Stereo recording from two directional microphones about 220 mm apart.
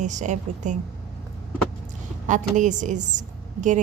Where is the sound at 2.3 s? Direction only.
35° right (ahead or behind).